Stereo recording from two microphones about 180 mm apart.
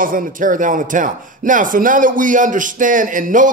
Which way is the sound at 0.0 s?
50° right (ahead or behind).